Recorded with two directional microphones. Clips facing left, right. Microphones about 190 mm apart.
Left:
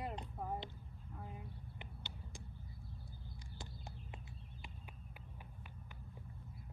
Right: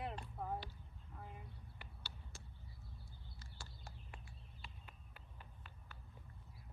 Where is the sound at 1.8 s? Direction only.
20° left (ahead or behind).